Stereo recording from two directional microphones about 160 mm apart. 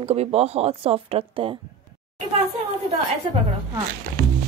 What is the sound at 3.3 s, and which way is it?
Speech, 35° right (ahead or behind).